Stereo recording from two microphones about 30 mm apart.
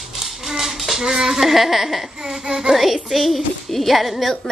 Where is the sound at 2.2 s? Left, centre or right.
Right.